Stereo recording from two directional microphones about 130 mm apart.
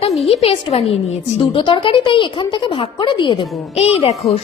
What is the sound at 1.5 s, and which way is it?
Speech, 40° left (ahead or behind).